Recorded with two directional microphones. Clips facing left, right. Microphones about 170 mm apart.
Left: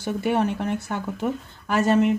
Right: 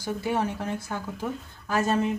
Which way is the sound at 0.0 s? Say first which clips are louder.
Left 4 dB; 65° left (ahead or behind).